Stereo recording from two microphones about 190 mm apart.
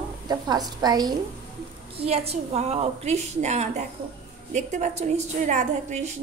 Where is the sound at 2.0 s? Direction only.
30° right (ahead or behind).